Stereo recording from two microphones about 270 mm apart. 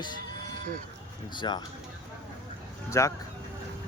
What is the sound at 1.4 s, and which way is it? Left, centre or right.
Speech, centre.